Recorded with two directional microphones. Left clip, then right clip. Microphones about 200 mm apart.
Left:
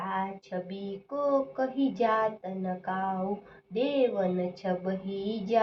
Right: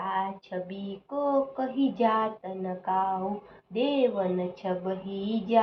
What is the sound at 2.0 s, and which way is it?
Speech, 5° right (ahead or behind).